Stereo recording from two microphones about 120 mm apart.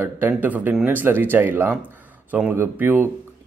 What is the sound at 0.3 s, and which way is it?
Speech, 15° right (ahead or behind).